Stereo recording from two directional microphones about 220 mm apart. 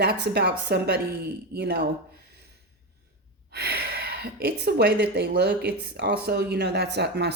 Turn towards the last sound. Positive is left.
turn(degrees=-50)  # may be behind; listen again after turning